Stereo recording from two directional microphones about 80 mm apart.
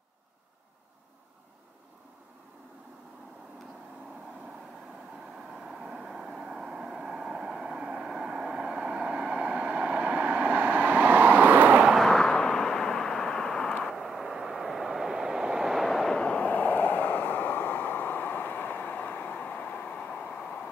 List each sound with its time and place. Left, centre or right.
5.6 s vehicle: centre
12.0 s a sound: centre
13.9 s vehicle: centre